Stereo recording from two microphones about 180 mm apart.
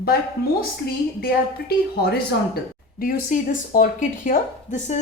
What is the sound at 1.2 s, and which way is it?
A woman's voice, 60° left (ahead or behind).